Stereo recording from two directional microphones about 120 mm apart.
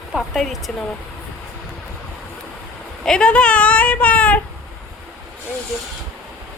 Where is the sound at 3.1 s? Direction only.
10° left (ahead or behind).